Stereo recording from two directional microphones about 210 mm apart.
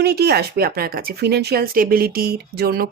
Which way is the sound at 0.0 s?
50° right (ahead or behind).